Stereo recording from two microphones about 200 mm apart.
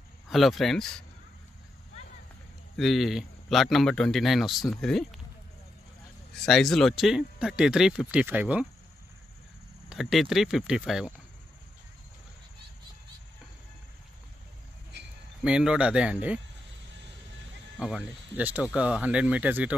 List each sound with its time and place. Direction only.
0.3 s speech: centre (ahead or behind)
2.8 s speech: centre (ahead or behind)
6.4 s speech: centre (ahead or behind)
9.8 s speech: centre (ahead or behind)
15.4 s speech: 5° right (ahead or behind)
17.7 s speech: 5° right (ahead or behind)